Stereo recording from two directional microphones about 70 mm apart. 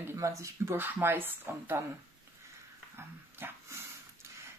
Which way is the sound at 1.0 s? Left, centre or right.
Right.